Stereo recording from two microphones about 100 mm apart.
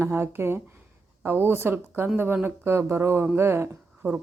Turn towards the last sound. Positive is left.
turn(degrees=-25)  # may be behind; listen again after turning